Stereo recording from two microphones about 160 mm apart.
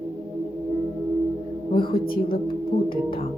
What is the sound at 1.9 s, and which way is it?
A woman's voice, 35° left (ahead or behind).